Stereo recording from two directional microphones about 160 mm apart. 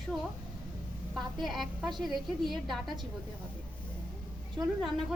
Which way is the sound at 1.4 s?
Centre (ahead or behind).